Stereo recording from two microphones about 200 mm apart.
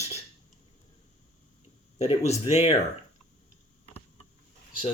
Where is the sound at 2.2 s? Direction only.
30° left (ahead or behind).